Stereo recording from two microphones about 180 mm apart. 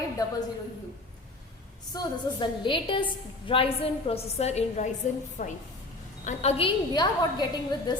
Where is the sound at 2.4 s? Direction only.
30° left (ahead or behind).